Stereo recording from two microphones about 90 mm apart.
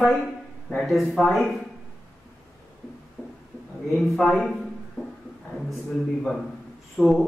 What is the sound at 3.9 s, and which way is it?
Speech, centre (ahead or behind).